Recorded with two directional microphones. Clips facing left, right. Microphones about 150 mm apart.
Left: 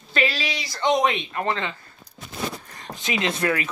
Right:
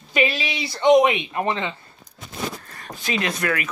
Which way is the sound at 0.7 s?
20° right (ahead or behind).